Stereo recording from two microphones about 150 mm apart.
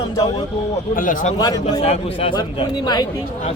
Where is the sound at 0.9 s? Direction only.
60° left (ahead or behind).